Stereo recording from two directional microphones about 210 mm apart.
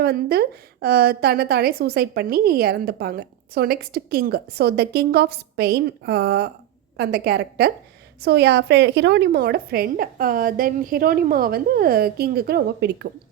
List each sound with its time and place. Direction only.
0.0 s a woman's voice: 50° right (ahead or behind)